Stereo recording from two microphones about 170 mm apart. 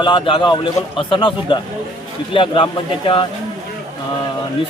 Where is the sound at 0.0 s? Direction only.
30° left (ahead or behind).